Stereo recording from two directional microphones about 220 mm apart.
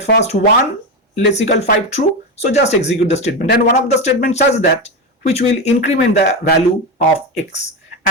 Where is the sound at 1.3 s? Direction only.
30° left (ahead or behind).